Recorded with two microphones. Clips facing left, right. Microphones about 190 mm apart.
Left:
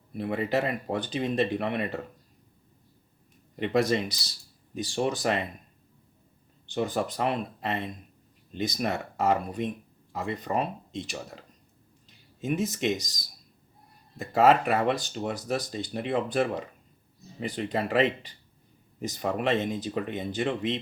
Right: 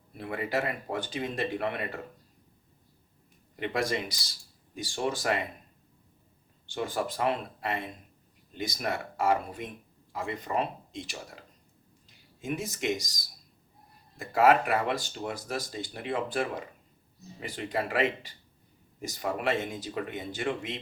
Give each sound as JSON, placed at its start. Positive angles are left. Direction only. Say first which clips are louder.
{"t": 0.2, "sound": "speech", "louder": "left 4 dB", "side_deg": 20}
{"t": 3.6, "sound": "speech", "louder": "left 5 dB", "side_deg": 25}
{"t": 6.7, "sound": "speech", "louder": "left 3 dB", "side_deg": 20}
{"t": 14.2, "sound": "speech", "louder": "left 2 dB", "side_deg": 20}